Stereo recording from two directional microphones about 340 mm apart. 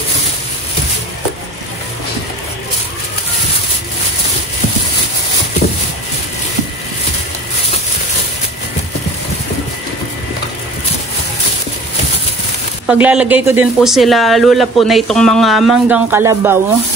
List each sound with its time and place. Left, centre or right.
12.8 s speech: centre